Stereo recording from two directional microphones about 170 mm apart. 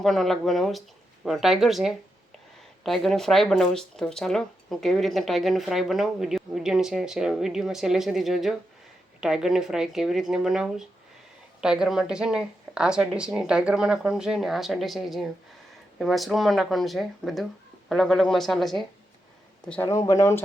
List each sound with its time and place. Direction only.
0.0 s speech: centre (ahead or behind)
19.9 s speech: 20° left (ahead or behind)